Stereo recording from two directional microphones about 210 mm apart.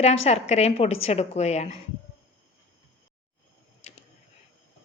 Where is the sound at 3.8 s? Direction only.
30° left (ahead or behind).